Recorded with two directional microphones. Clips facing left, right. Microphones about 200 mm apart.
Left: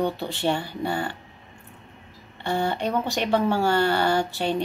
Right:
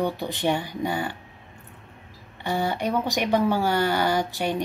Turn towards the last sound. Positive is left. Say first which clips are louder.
# left 1 dB
turn(degrees=-15)  # may be behind; listen again after turning